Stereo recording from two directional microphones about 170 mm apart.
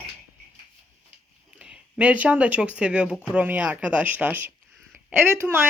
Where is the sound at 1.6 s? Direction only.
5° right (ahead or behind).